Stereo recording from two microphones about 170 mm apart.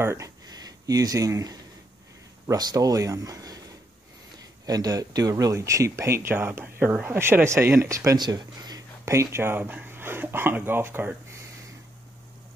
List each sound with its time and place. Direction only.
0.0 s speech: 15° right (ahead or behind)
4.6 s speech: 20° right (ahead or behind)